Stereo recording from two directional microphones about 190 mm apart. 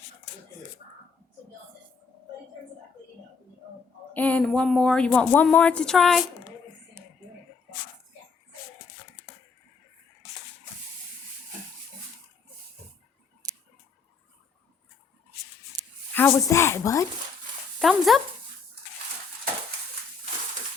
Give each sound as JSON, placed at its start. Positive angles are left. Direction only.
{"t": 4.1, "sound": "a woman's voice", "side_deg": 10}
{"t": 15.7, "sound": "a sound", "side_deg": -20}
{"t": 16.1, "sound": "speech", "side_deg": 15}
{"t": 17.7, "sound": "speech", "side_deg": 0}